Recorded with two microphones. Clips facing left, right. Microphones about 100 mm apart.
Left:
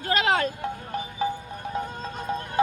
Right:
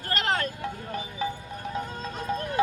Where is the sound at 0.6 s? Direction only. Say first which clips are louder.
Left 2 dB; 30° left (ahead or behind).